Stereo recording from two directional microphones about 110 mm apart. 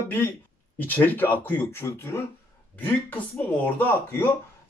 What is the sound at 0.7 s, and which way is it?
Speech, 15° left (ahead or behind).